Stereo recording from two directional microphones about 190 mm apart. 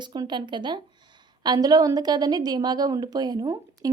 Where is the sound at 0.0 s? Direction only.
20° right (ahead or behind).